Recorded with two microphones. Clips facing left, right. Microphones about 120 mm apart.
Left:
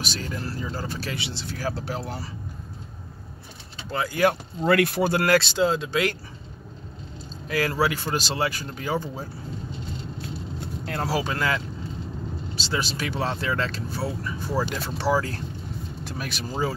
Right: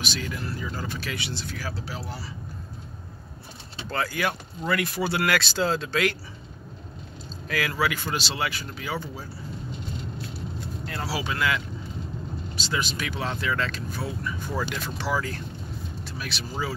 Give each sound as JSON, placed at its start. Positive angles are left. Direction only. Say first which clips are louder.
{"t": 0.0, "sound": "speech", "louder": "left 1 dB", "side_deg": 40}
{"t": 1.6, "sound": "speech", "louder": "left 5 dB", "side_deg": 50}
{"t": 4.6, "sound": "speech", "louder": "left 6 dB", "side_deg": 60}
{"t": 5.1, "sound": "speech", "louder": "left 4 dB", "side_deg": 35}
{"t": 5.5, "sound": "speech", "louder": "left 3 dB", "side_deg": 15}
{"t": 7.4, "sound": "speech", "louder": "left 3 dB", "side_deg": 30}
{"t": 10.9, "sound": "speech", "louder": "left 4 dB", "side_deg": 50}
{"t": 16.2, "sound": "speech", "louder": "left 3 dB", "side_deg": 45}